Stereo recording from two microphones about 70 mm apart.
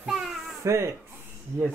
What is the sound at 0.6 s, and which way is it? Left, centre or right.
Speech, right.